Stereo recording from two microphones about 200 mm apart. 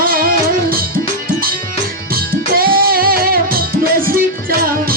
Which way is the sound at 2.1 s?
50° right (ahead or behind).